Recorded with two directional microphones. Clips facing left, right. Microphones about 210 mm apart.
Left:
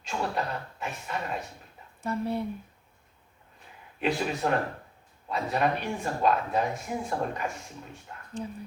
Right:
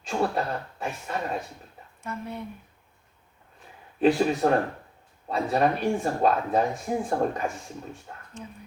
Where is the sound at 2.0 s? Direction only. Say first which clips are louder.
Left 5 dB; 35° left (ahead or behind).